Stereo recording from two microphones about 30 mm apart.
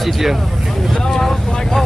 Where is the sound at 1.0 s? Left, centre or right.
Centre.